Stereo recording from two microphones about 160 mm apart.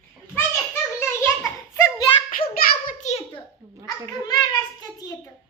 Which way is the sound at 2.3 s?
60° left (ahead or behind).